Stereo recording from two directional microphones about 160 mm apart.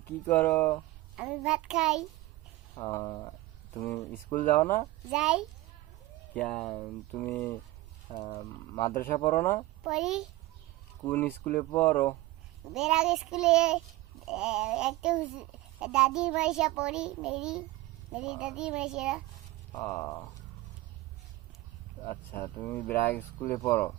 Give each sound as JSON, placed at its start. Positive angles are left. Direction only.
{"t": 0.3, "sound": "speech", "side_deg": 10}
{"t": 1.1, "sound": "a child's voice", "side_deg": -5}
{"t": 2.9, "sound": "speech", "side_deg": 25}
{"t": 5.1, "sound": "a child's voice", "side_deg": -5}
{"t": 6.3, "sound": "speech", "side_deg": 5}
{"t": 8.1, "sound": "speech", "side_deg": 45}
{"t": 9.0, "sound": "speech", "side_deg": 15}
{"t": 9.8, "sound": "a child's voice", "side_deg": -5}
{"t": 11.0, "sound": "speech", "side_deg": 10}
{"t": 12.7, "sound": "a child's voice", "side_deg": -5}
{"t": 19.7, "sound": "speech", "side_deg": 20}
{"t": 22.1, "sound": "speech", "side_deg": 15}